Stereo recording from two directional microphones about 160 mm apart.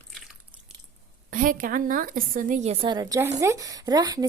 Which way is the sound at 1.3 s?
55° right (ahead or behind).